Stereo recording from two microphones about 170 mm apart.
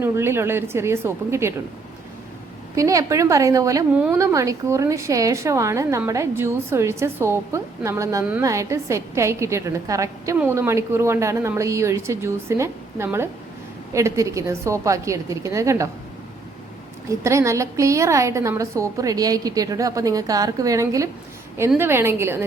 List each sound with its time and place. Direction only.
0.0 s a woman's voice: 15° right (ahead or behind)
2.7 s a woman's voice: 20° right (ahead or behind)
17.1 s a woman's voice: 15° right (ahead or behind)